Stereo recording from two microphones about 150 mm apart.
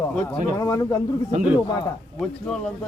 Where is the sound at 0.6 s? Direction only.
20° left (ahead or behind).